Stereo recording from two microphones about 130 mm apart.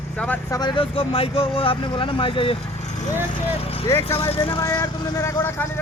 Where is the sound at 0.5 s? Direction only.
35° left (ahead or behind).